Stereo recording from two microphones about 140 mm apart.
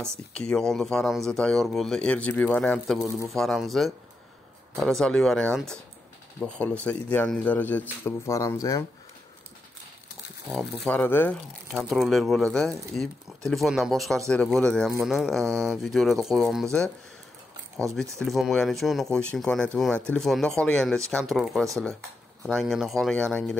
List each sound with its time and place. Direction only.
0.3 s speech: 5° left (ahead or behind); by 8.8 s 25° left (ahead or behind)
10.5 s speech: 5° left (ahead or behind)
11.7 s speech: centre (ahead or behind)
18.2 s speech: centre (ahead or behind)